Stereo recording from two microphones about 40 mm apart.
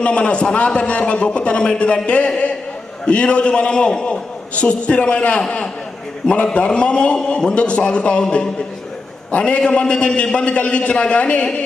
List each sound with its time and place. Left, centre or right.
0.0 s a man's voice: left
6.3 s a man's voice: left
9.3 s a man's voice: left